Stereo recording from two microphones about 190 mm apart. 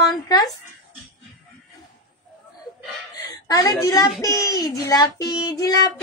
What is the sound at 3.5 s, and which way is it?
A woman's voice, 20° left (ahead or behind).